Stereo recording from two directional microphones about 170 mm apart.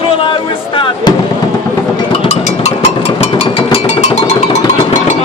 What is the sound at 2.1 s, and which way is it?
Music, 40° left (ahead or behind).